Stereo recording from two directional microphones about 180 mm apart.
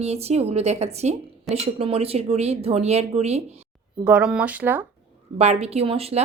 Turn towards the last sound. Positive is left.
turn(degrees=-35)  # may be behind; listen again after turning